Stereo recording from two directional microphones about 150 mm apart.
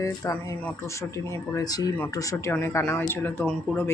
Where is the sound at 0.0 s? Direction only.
20° left (ahead or behind).